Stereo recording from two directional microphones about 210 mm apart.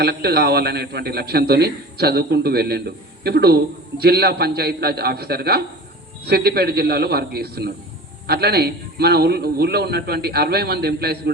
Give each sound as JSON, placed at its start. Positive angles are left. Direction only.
{"t": 0.0, "sound": "a man's voice", "side_deg": -50}